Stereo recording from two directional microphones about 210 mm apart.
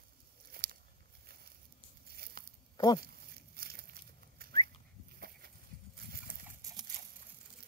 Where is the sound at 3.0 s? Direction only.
45° right (ahead or behind).